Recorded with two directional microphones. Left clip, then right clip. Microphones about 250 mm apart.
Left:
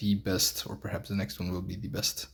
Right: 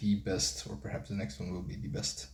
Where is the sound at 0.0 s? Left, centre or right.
Left.